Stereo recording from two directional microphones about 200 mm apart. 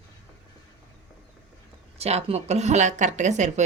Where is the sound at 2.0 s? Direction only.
30° right (ahead or behind).